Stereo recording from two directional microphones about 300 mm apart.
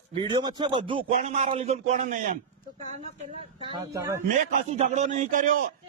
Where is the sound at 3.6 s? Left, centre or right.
Centre.